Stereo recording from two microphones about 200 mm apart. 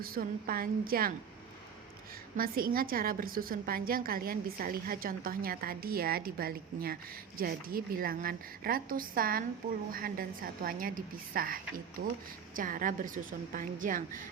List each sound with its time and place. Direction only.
0.0 s a woman's voice: 45° right (ahead or behind)
2.3 s a woman's voice: 45° right (ahead or behind)